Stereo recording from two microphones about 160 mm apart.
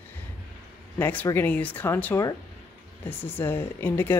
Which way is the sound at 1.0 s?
10° left (ahead or behind).